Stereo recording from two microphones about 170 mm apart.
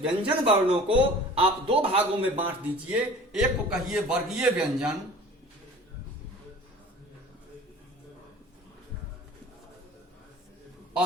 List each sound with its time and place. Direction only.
0.0 s a man's voice: 30° right (ahead or behind)
2.9 s a man's voice: 5° right (ahead or behind)